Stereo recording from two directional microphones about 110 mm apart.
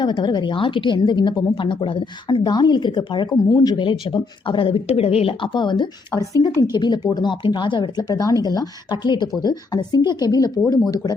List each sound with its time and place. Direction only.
0.0 s speech: 40° left (ahead or behind)